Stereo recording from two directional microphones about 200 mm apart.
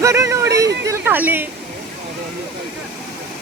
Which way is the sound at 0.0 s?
15° right (ahead or behind).